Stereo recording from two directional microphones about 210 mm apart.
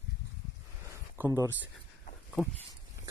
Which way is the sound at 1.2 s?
10° right (ahead or behind).